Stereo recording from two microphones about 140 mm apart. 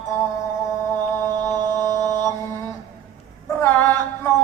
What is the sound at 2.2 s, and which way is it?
Mantra, 20° left (ahead or behind).